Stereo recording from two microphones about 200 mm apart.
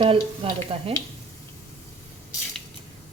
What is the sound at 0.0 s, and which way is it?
Speech, 30° right (ahead or behind).